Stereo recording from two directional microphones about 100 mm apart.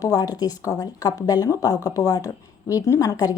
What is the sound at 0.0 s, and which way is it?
A woman's voice, 40° left (ahead or behind).